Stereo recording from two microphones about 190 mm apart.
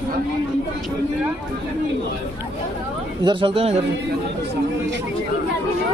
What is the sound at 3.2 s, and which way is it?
Speech, 25° right (ahead or behind).